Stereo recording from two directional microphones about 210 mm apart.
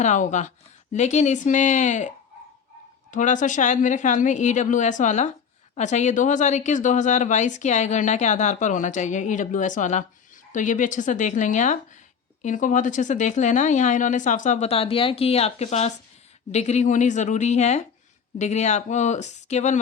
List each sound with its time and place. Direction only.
0.0 s speech: 35° left (ahead or behind)